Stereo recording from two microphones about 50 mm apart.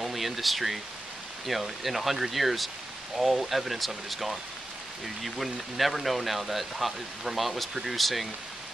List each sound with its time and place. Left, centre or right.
0.0 s speech: centre